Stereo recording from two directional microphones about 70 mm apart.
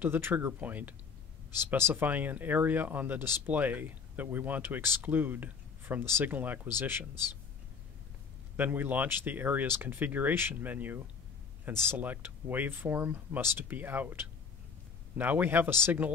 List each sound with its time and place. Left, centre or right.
0.0 s a man's voice: right
8.5 s speech: right